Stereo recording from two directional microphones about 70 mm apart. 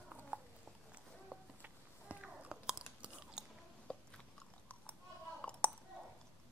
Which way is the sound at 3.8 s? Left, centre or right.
Centre.